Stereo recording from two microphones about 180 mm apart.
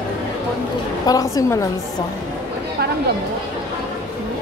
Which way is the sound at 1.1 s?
20° left (ahead or behind).